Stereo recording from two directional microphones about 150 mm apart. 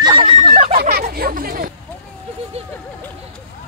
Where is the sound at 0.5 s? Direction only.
40° right (ahead or behind).